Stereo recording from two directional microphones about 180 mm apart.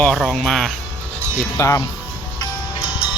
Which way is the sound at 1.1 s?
15° right (ahead or behind).